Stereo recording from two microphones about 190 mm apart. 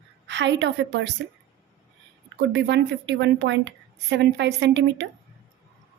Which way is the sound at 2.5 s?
65° right (ahead or behind).